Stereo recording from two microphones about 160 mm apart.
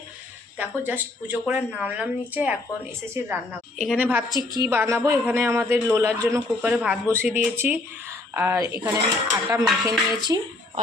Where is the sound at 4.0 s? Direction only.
10° right (ahead or behind).